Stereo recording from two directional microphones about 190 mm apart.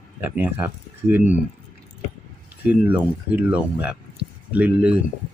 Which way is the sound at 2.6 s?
10° right (ahead or behind).